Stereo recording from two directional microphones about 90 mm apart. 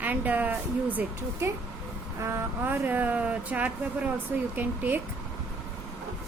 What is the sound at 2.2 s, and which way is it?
Speech, 30° right (ahead or behind).